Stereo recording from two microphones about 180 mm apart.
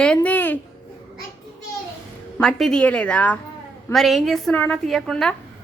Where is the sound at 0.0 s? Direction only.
5° left (ahead or behind).